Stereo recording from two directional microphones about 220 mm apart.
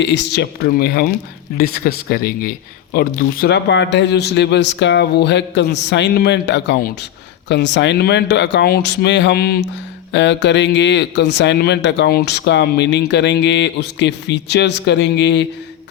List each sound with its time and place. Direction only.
0.0 s speech: 55° left (ahead or behind)